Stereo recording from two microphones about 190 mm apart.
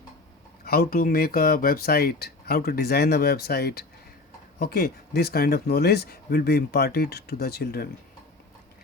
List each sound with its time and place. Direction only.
0.6 s speech: 55° left (ahead or behind)